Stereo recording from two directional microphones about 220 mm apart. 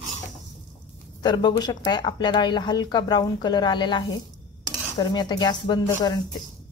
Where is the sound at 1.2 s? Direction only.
20° left (ahead or behind).